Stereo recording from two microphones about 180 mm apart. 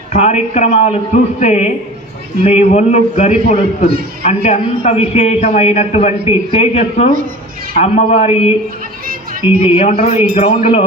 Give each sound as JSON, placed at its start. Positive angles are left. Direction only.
{"t": 0.1, "sound": "a man's voice", "side_deg": 40}
{"t": 9.7, "sound": "a man's voice", "side_deg": 35}